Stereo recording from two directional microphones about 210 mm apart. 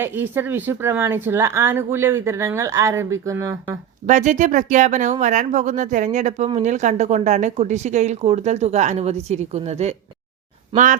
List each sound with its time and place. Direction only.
0.0 s speech: 10° right (ahead or behind)
4.0 s speech: 35° right (ahead or behind)